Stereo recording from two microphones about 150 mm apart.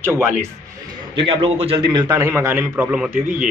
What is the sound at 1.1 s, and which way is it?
A man's voice, 35° right (ahead or behind).